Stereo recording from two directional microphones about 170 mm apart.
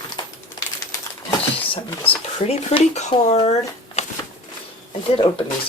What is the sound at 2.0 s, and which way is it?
Speech, 40° left (ahead or behind).